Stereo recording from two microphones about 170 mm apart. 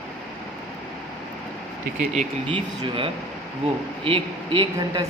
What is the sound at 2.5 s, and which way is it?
Speech, 30° right (ahead or behind).